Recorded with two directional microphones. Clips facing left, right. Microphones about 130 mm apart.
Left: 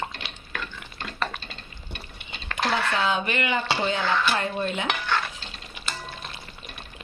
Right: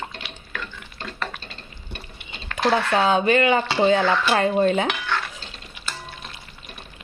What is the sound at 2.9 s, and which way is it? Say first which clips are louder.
Speech: right 7 dB; 40° right (ahead or behind).